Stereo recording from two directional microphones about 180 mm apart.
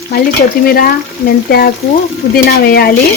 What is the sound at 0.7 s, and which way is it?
Speech, 55° left (ahead or behind).